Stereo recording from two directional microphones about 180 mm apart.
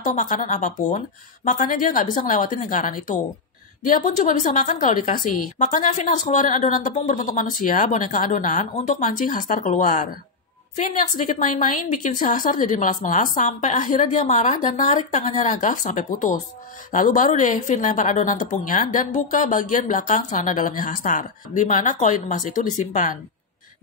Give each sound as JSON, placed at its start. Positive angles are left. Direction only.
{"t": 0.0, "sound": "a woman's voice", "side_deg": 45}